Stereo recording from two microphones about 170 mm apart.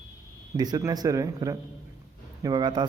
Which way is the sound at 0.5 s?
20° right (ahead or behind).